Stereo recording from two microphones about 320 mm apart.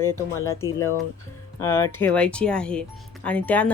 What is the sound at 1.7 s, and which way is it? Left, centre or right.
Speech, centre.